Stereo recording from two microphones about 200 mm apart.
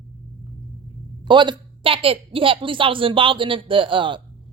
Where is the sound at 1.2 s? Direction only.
25° right (ahead or behind).